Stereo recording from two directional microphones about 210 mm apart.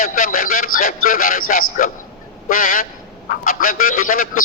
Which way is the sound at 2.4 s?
40° left (ahead or behind).